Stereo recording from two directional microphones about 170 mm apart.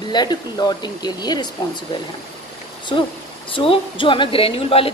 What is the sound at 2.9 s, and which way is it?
A woman's voice, 30° left (ahead or behind).